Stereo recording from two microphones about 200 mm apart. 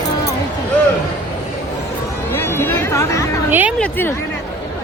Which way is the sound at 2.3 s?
10° left (ahead or behind).